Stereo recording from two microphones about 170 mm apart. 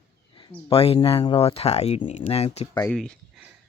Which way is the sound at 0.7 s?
35° left (ahead or behind).